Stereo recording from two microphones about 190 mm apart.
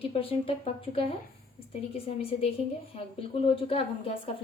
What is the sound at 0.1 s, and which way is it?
A woman's voice, 30° left (ahead or behind).